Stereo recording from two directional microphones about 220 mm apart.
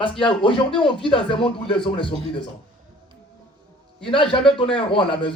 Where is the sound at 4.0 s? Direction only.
25° left (ahead or behind).